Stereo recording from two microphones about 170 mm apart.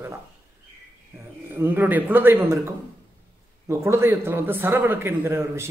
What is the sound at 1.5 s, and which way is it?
A man's voice, 10° right (ahead or behind).